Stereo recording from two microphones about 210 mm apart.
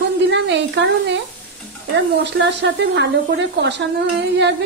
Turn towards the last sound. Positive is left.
turn(degrees=-55)  # may be behind; listen again after turning